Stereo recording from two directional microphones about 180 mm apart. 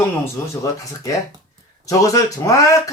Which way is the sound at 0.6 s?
20° left (ahead or behind).